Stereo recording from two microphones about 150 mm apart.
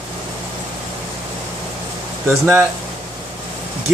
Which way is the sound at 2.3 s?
20° right (ahead or behind).